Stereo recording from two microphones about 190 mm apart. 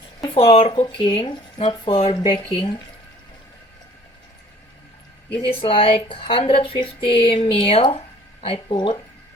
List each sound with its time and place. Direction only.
0.3 s speech: 30° left (ahead or behind)
5.4 s speech: 30° left (ahead or behind)